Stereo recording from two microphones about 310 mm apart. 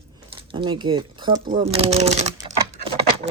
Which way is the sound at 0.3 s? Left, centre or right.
Centre.